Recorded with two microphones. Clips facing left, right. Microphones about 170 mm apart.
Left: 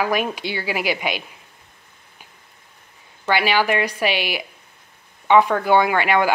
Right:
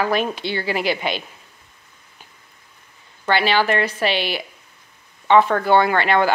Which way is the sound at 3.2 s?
10° left (ahead or behind).